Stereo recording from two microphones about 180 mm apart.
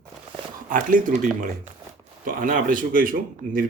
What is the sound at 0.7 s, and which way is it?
Speech, 50° right (ahead or behind).